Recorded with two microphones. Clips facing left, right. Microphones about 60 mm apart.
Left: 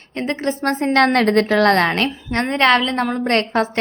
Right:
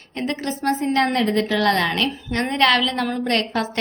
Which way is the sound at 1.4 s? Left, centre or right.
Left.